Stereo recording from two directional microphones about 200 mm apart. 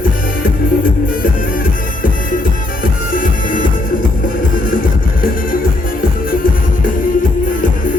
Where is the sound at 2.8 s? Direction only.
45° left (ahead or behind).